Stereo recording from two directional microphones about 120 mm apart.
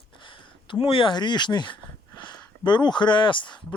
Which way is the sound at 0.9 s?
45° left (ahead or behind).